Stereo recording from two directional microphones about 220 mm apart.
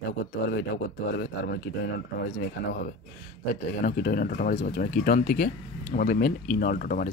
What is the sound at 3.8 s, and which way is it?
Speech, 40° left (ahead or behind).